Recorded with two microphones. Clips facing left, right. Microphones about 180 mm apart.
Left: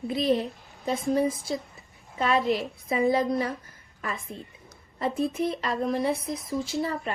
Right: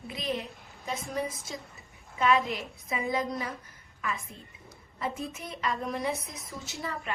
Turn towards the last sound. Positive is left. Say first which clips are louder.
# left 7 dB
turn(degrees=30)  # may be behind; listen again after turning